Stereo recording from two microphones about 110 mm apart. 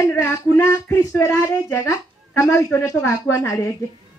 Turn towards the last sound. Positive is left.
turn(degrees=30)  # may be behind; listen again after turning